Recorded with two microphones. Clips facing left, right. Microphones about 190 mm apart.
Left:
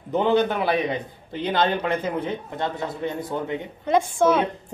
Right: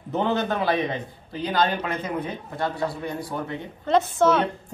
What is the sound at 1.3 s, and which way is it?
A man's voice, 25° left (ahead or behind).